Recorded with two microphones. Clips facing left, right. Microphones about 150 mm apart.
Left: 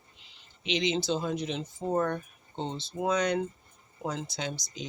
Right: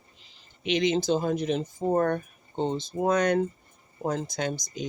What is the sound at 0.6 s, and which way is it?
Speech, 50° right (ahead or behind).